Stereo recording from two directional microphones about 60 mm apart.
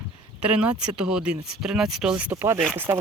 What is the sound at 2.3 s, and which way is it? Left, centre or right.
Speech, right.